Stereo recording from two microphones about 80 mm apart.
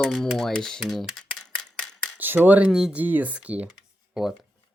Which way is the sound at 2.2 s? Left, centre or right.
Right.